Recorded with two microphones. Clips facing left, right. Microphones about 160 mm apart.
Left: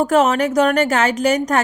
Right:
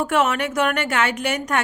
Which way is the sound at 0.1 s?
40° left (ahead or behind).